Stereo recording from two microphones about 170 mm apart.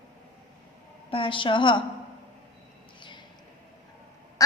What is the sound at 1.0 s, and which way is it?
Speech, 30° left (ahead or behind).